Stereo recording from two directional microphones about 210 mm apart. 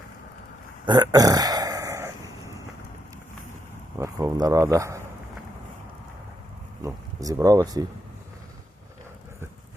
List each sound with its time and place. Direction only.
0.9 s a sound: 20° right (ahead or behind)
4.0 s speech: 15° right (ahead or behind)
6.8 s speech: 15° right (ahead or behind)